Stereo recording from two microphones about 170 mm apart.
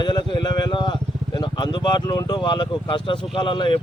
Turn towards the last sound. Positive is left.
turn(degrees=30)  # may be behind; listen again after turning